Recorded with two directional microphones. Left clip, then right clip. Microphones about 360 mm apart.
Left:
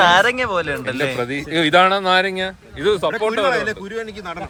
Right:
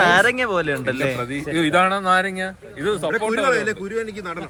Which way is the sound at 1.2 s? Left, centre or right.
Left.